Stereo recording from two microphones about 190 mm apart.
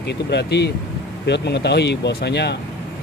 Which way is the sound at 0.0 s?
65° left (ahead or behind).